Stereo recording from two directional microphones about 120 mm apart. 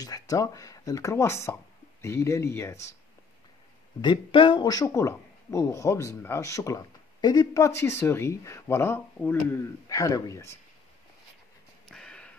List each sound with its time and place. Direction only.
0.0 s speech: 30° left (ahead or behind)
4.0 s speech: 40° left (ahead or behind); by 9.6 s 15° left (ahead or behind)
9.8 s speech: 30° left (ahead or behind)
11.9 s a sound: 5° left (ahead or behind)